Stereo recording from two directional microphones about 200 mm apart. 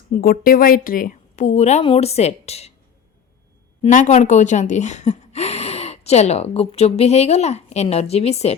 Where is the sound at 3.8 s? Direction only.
35° left (ahead or behind).